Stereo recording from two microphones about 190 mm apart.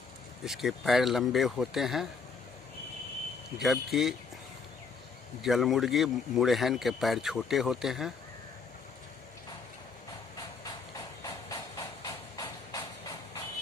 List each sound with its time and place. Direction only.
0.5 s a man's voice: centre (ahead or behind)
3.6 s a man's voice: centre (ahead or behind)
5.4 s a man's voice: centre (ahead or behind)
11.2 s steam: 20° left (ahead or behind)